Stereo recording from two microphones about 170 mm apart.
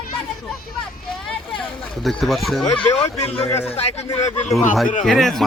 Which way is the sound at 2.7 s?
30° left (ahead or behind).